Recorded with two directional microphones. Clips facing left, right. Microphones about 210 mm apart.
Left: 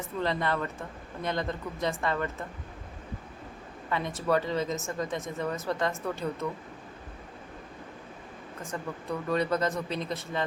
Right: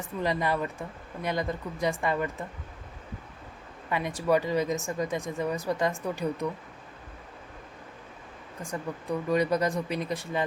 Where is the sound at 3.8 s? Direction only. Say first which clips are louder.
Right 2 dB; 15° right (ahead or behind).